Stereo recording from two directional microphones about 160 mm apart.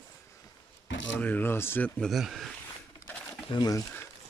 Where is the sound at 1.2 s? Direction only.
10° left (ahead or behind).